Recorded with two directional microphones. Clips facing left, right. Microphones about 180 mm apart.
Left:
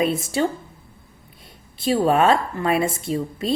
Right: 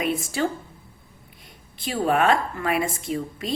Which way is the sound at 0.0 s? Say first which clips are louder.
Left 4 dB; 30° left (ahead or behind).